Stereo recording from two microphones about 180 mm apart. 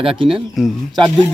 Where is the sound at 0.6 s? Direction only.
Centre (ahead or behind).